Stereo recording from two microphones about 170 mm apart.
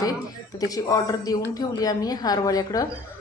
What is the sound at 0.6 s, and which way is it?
Speech, 20° left (ahead or behind).